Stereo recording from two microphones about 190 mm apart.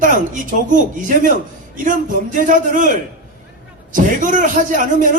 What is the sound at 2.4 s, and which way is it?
A man's voice, 45° right (ahead or behind).